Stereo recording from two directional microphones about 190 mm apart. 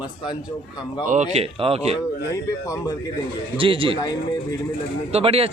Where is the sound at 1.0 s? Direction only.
40° right (ahead or behind).